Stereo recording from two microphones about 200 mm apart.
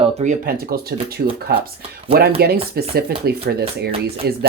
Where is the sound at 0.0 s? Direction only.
35° right (ahead or behind).